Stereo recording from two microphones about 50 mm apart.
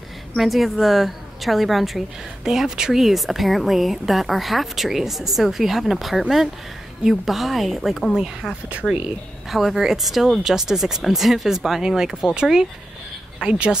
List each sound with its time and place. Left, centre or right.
0.4 s speech: centre
8.8 s speech: left
9.5 s speech: centre